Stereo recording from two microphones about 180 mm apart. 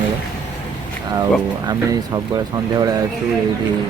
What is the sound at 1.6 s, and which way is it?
Speech, 20° right (ahead or behind).